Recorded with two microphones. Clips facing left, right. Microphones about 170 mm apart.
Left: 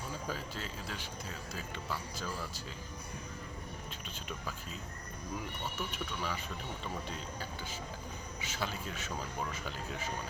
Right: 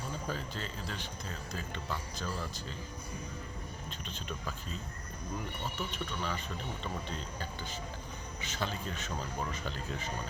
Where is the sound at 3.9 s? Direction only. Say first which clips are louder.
Right 2 dB; 10° left (ahead or behind).